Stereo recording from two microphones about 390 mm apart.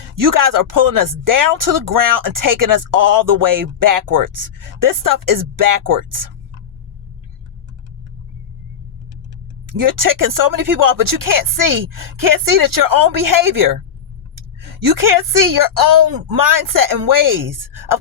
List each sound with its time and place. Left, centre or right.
0.2 s speech: right
9.6 s speech: right
14.8 s speech: right